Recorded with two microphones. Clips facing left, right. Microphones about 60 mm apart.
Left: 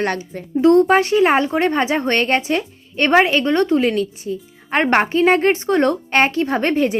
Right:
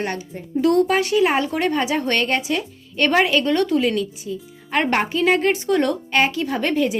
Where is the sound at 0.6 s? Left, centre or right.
Left.